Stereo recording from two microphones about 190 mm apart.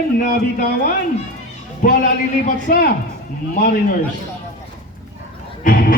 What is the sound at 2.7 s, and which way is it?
Speech, 55° left (ahead or behind).